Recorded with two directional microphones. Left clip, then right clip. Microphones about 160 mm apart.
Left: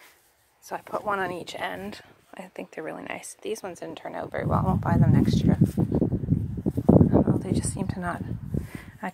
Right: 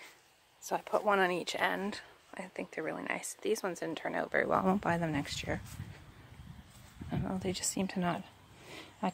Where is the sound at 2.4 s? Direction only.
20° left (ahead or behind).